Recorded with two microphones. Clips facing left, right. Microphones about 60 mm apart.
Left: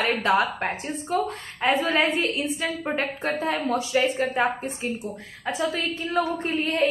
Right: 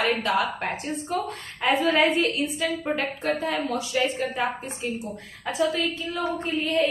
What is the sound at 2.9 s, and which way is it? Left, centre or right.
A woman's voice, left.